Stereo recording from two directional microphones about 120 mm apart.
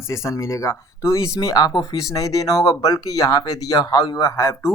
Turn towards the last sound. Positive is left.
turn(degrees=25)  # may be behind; listen again after turning